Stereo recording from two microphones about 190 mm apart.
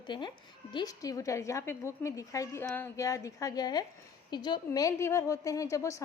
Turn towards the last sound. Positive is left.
turn(degrees=15)  # may be behind; listen again after turning